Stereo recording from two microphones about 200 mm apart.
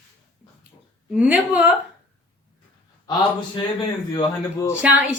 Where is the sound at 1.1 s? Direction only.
5° right (ahead or behind).